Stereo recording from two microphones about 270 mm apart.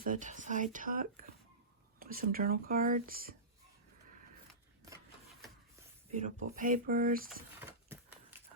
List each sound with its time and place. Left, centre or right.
0.0 s speech: right
6.1 s speech: right
7.6 s a sound: centre